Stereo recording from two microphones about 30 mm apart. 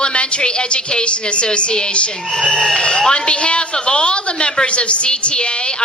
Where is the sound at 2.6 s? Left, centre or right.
Centre.